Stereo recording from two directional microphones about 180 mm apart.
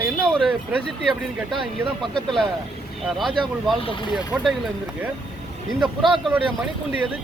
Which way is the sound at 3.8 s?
25° left (ahead or behind).